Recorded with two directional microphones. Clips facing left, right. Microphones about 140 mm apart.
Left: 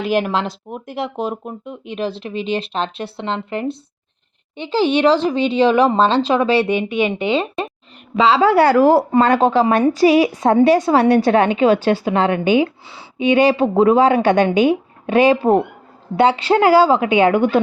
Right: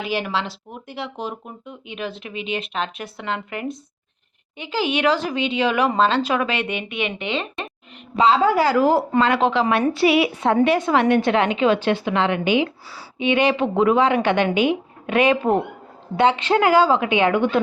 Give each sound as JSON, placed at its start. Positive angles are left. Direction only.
{"t": 0.0, "sound": "a woman's voice", "side_deg": 45}
{"t": 8.2, "sound": "a woman's voice", "side_deg": 90}
{"t": 9.1, "sound": "a woman's voice", "side_deg": 45}